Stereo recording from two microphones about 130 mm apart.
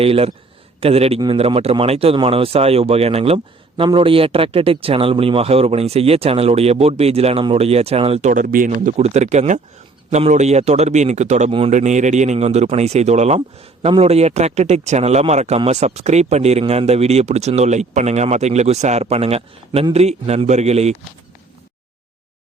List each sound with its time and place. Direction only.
0.0 s speech: 50° right (ahead or behind)
8.3 s speech: 90° right; by 20.9 s 55° right (ahead or behind)